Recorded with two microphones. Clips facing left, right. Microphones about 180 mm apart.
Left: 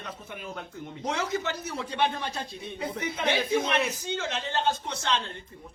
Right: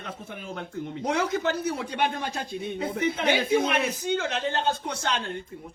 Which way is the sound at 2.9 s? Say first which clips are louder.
Right 3 dB; 55° right (ahead or behind).